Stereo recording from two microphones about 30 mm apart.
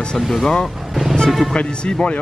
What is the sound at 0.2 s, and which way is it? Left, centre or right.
Speech, centre.